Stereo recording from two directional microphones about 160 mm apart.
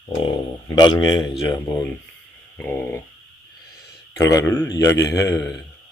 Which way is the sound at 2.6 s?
10° left (ahead or behind).